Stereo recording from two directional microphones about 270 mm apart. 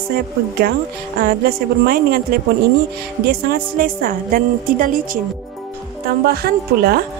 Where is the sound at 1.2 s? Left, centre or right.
Right.